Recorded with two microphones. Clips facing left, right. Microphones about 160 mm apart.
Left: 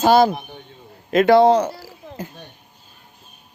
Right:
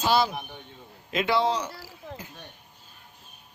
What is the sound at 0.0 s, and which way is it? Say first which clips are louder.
Speech: left 9 dB; 50° left (ahead or behind).